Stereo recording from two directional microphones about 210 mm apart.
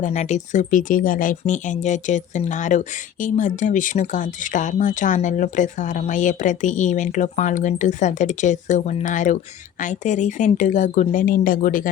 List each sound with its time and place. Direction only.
0.0 s speech: 35° left (ahead or behind)